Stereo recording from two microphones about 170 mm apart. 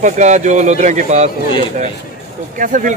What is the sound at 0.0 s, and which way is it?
Speech, 45° right (ahead or behind).